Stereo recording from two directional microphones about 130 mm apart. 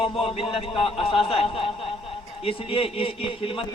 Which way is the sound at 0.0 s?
45° left (ahead or behind).